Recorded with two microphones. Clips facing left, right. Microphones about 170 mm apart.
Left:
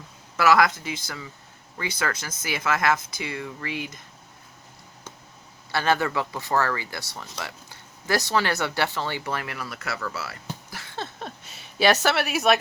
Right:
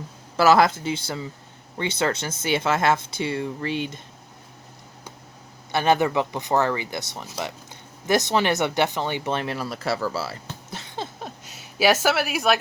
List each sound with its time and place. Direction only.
0.3 s speech: 30° right (ahead or behind)
5.7 s speech: 20° right (ahead or behind)
10.7 s a sound: 20° right (ahead or behind)
11.5 s speech: 5° right (ahead or behind)